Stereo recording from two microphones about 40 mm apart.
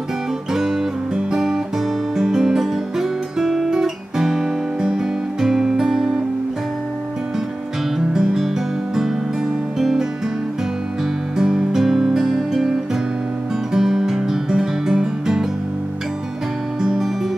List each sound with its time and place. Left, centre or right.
0.5 s guitar: centre
8.1 s music: centre
9.8 s music: centre
11.3 s music: centre
11.7 s music: centre
13.7 s music: centre
16.8 s music: centre